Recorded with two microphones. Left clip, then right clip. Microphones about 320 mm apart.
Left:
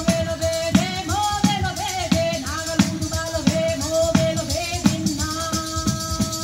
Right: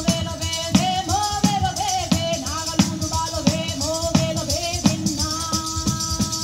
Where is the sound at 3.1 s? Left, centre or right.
Centre.